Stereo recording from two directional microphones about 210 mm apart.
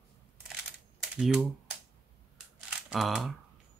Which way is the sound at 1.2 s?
Centre (ahead or behind).